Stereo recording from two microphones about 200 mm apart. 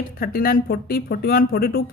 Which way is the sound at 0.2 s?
45° left (ahead or behind).